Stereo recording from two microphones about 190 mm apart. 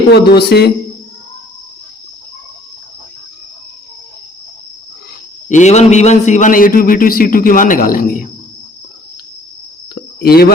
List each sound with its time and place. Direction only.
0.3 s a man's voice: 60° left (ahead or behind)
5.5 s a man's voice: 40° left (ahead or behind)
9.9 s a sound: 55° left (ahead or behind)